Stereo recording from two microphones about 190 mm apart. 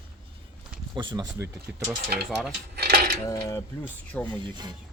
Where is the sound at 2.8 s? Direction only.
55° right (ahead or behind).